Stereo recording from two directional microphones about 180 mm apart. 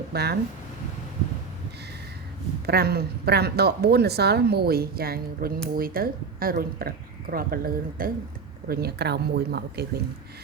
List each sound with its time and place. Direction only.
0.1 s speech: 65° right (ahead or behind)
2.6 s a woman's voice: 60° right (ahead or behind)